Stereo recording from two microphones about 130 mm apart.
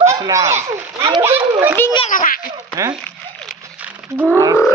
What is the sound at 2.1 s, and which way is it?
Speech, 90° left.